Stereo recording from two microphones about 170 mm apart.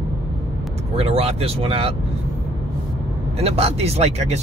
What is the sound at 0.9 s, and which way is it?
Speech, 35° right (ahead or behind).